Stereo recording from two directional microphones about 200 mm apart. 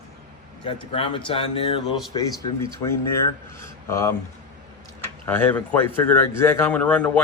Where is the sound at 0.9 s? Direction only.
25° left (ahead or behind).